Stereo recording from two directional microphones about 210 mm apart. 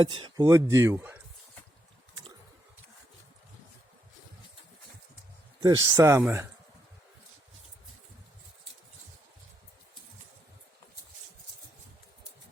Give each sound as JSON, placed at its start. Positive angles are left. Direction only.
{"t": 0.0, "sound": "speech", "side_deg": -25}
{"t": 5.6, "sound": "speech", "side_deg": -15}